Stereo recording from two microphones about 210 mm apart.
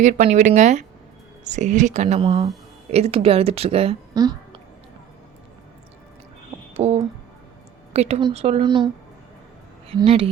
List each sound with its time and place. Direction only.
0.0 s a woman's voice: 35° right (ahead or behind); by 4.4 s 20° right (ahead or behind)
6.7 s a woman's voice: 30° right (ahead or behind)
10.0 s a woman's voice: 30° right (ahead or behind)